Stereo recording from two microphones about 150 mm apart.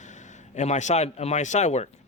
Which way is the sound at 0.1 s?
50° left (ahead or behind).